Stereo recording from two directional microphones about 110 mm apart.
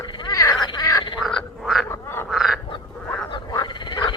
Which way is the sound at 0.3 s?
35° left (ahead or behind).